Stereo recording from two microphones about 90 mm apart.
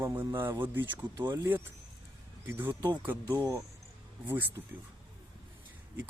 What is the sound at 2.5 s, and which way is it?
Speech, 25° right (ahead or behind).